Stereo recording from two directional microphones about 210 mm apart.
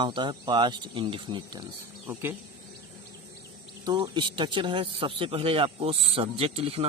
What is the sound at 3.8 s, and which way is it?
Speech, 20° right (ahead or behind).